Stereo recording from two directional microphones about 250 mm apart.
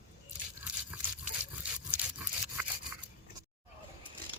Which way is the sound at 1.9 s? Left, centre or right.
Centre.